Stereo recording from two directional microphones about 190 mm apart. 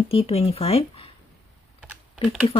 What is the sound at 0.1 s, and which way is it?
Speech, 30° left (ahead or behind).